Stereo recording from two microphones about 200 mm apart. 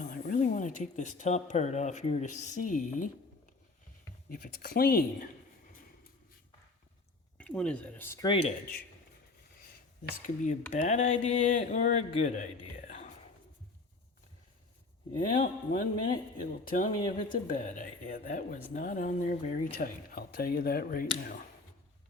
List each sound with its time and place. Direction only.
0.0 s speech: 40° left (ahead or behind)
4.3 s speech: 45° left (ahead or behind)
7.3 s speech: 5° left (ahead or behind)
8.3 s speech: 30° left (ahead or behind)
10.2 s speech: 40° left (ahead or behind)
15.2 s speech: 45° left (ahead or behind)